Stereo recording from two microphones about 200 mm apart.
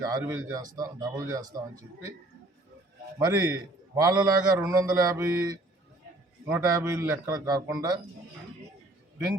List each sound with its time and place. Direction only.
0.0 s a man's voice: 15° right (ahead or behind)
3.2 s a man's voice: 15° right (ahead or behind)